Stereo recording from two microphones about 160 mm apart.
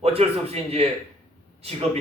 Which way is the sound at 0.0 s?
40° right (ahead or behind).